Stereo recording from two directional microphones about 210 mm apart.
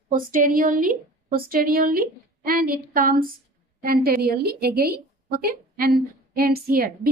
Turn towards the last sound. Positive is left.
turn(degrees=-45)  # may be behind; listen again after turning